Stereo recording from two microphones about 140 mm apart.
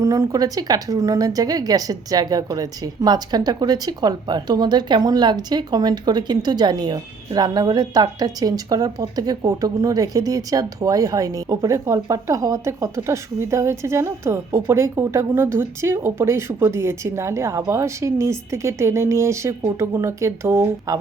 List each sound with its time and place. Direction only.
0.0 s a woman's voice: 25° right (ahead or behind)